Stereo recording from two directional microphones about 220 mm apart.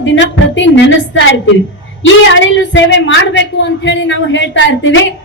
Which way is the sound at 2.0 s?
55° left (ahead or behind).